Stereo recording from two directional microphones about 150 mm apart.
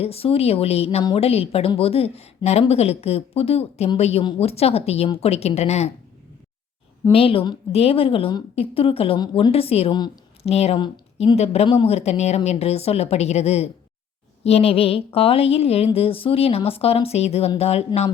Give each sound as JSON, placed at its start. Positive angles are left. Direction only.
{"t": 0.0, "sound": "a woman's voice", "side_deg": 40}
{"t": 7.1, "sound": "a woman's voice", "side_deg": 40}